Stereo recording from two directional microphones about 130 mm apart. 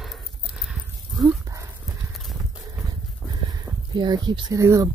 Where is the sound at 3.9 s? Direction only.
35° right (ahead or behind).